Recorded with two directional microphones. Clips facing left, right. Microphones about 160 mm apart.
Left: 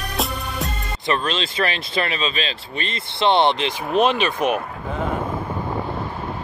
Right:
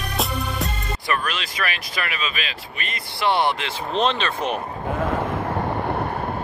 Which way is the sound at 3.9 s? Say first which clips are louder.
Left 4 dB; 10° left (ahead or behind).